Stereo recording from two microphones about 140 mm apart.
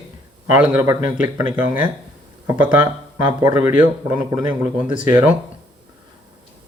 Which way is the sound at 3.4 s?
15° right (ahead or behind).